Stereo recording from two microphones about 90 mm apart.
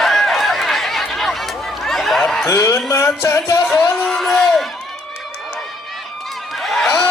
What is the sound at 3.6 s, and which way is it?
Speech, 10° left (ahead or behind).